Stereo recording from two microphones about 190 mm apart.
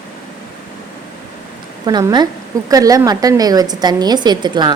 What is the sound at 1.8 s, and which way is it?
A woman's voice, 20° right (ahead or behind).